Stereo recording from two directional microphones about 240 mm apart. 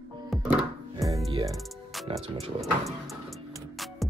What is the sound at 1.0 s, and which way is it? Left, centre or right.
Music, centre.